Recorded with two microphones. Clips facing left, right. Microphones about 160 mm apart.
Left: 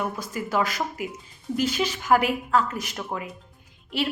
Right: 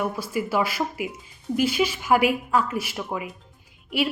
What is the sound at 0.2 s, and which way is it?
Speech, 10° right (ahead or behind).